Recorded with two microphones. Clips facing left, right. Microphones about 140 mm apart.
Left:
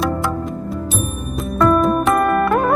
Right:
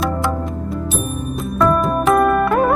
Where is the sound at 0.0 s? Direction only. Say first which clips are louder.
Even; centre (ahead or behind).